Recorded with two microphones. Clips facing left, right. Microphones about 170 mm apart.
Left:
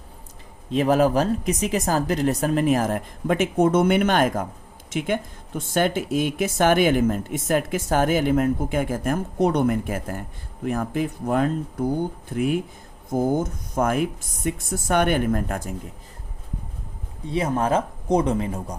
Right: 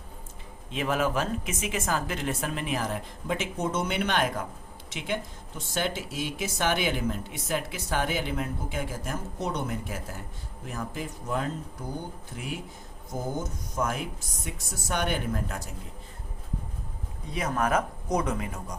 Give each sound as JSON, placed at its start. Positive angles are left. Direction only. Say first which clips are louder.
{"t": 0.7, "sound": "speech", "louder": "left 9 dB", "side_deg": 40}
{"t": 17.3, "sound": "speech", "louder": "left 5 dB", "side_deg": 30}